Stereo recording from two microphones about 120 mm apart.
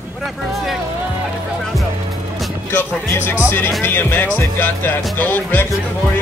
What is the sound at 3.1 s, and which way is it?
Speech, 20° left (ahead or behind).